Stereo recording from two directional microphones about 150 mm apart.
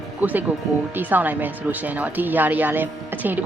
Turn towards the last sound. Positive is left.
turn(degrees=-10)  # may be behind; listen again after turning